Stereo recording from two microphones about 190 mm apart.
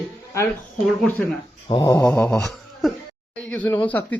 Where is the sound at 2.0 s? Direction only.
5° left (ahead or behind).